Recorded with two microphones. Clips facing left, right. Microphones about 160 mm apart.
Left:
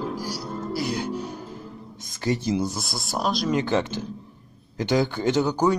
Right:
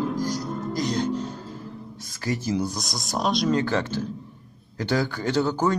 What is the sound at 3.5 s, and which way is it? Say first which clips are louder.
Speech: left 1 dB; 20° left (ahead or behind).